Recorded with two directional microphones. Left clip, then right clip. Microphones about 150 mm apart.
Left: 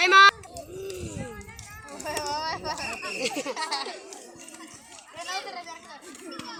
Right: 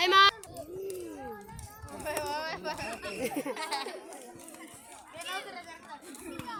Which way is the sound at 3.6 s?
25° left (ahead or behind).